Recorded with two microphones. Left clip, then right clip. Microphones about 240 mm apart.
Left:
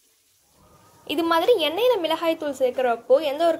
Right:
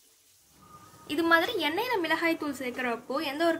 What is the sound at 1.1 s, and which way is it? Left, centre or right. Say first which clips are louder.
A woman's voice: left 5 dB; centre.